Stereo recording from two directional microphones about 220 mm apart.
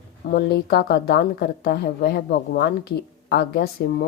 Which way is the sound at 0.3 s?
45° left (ahead or behind).